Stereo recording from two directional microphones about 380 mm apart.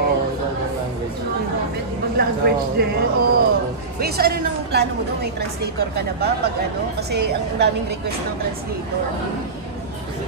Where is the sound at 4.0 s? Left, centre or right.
Right.